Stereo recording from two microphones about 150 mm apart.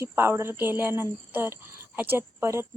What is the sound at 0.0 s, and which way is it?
Speech, 15° right (ahead or behind).